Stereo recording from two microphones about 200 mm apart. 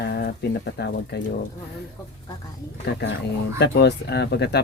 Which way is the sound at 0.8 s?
55° left (ahead or behind).